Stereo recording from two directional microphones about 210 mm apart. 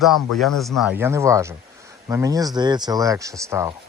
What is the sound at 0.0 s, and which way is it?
Speech, centre (ahead or behind).